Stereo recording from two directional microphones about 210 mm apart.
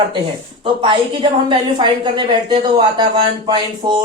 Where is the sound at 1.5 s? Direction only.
20° right (ahead or behind).